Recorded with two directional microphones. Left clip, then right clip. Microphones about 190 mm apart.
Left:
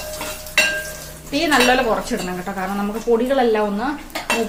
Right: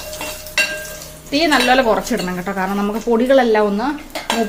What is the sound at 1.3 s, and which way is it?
Speech, 50° right (ahead or behind).